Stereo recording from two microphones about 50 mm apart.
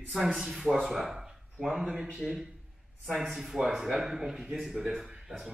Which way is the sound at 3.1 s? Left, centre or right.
Centre.